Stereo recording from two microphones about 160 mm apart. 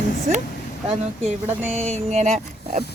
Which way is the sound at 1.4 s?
15° right (ahead or behind).